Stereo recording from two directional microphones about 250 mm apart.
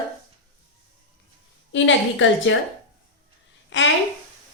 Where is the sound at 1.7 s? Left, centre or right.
Left.